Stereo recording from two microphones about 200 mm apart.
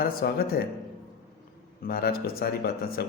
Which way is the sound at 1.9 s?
50° left (ahead or behind).